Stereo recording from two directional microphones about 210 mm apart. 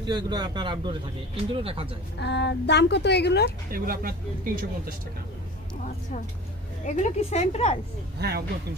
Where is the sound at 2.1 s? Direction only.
55° left (ahead or behind).